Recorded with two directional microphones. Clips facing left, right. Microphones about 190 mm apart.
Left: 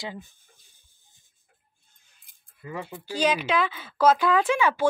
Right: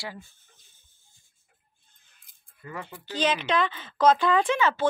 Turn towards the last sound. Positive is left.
turn(degrees=10)  # may be behind; listen again after turning